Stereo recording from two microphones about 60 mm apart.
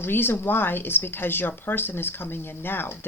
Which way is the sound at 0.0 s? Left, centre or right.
Left.